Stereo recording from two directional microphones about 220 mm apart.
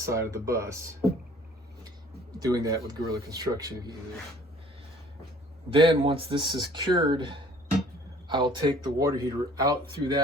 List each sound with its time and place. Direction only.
0.0 s speech: 15° right (ahead or behind)
2.4 s speech: 15° right (ahead or behind)
5.7 s speech: 25° right (ahead or behind)